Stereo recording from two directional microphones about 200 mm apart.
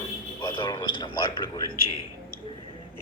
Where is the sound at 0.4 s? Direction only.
20° left (ahead or behind).